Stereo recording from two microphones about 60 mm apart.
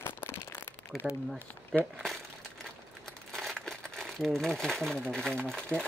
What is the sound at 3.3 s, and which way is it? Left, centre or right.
Crumpling, centre.